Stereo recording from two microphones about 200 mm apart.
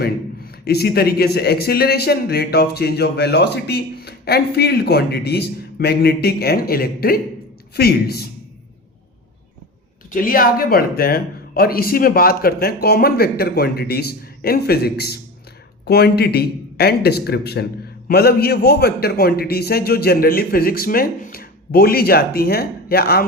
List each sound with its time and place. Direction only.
0.0 s speech: 50° left (ahead or behind)
10.1 s speech: 45° left (ahead or behind)